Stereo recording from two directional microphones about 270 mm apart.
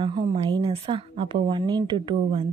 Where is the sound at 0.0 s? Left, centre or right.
Centre.